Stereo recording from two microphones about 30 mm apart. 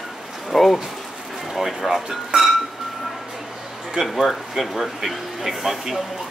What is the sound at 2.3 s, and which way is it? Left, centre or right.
Glass, right.